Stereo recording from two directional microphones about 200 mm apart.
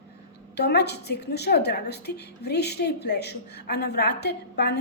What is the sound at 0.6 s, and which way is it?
A woman's voice, 55° left (ahead or behind).